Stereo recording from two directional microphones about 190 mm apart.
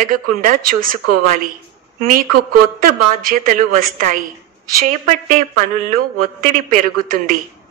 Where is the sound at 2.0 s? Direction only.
50° right (ahead or behind).